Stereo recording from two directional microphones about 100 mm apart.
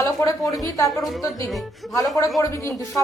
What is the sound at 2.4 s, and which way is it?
Speech, 30° left (ahead or behind).